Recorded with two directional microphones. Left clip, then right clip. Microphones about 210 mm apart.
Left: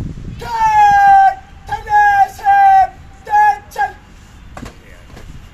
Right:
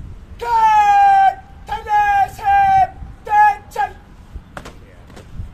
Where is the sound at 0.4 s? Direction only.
30° right (ahead or behind).